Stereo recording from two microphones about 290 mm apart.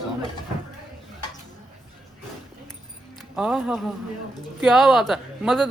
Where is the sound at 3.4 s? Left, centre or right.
Centre.